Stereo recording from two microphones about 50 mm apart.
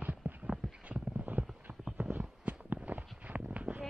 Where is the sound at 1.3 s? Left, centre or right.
Right.